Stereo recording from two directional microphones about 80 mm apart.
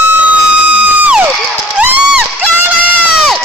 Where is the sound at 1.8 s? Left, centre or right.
Centre.